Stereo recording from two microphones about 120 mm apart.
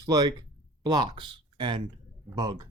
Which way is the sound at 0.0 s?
35° right (ahead or behind).